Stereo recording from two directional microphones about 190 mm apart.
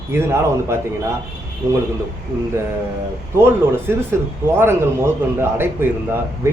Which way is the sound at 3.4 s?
10° right (ahead or behind).